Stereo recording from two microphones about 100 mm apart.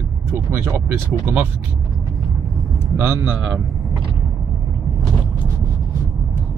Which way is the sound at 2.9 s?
20° right (ahead or behind).